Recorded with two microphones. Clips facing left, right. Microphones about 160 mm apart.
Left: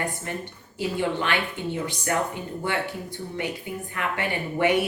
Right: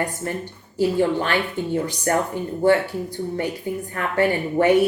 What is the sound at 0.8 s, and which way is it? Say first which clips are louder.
A woman's voice: right 7 dB; 40° right (ahead or behind).